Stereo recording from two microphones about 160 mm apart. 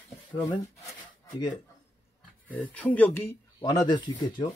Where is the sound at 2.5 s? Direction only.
10° left (ahead or behind).